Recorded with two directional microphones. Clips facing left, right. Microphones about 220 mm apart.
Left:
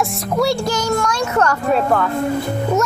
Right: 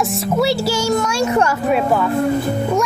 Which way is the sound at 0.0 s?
Centre (ahead or behind).